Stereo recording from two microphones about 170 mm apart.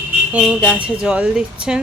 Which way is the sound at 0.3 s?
5° right (ahead or behind).